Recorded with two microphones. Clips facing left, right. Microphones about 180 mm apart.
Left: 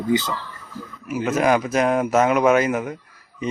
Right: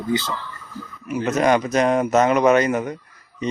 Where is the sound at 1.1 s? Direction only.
5° left (ahead or behind).